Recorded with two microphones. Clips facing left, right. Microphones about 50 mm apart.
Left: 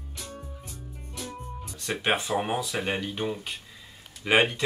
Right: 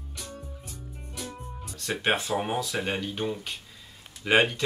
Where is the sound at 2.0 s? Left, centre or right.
Centre.